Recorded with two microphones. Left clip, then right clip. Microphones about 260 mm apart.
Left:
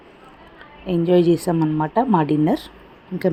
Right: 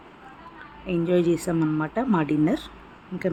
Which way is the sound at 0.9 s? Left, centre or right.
Centre.